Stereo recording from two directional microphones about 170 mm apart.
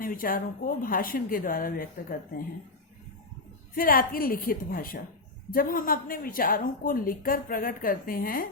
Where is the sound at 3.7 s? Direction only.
55° left (ahead or behind).